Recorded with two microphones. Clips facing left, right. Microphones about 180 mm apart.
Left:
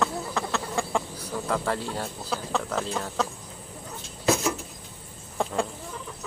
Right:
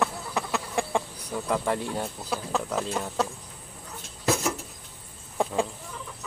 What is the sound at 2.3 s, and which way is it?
Speech, 5° right (ahead or behind).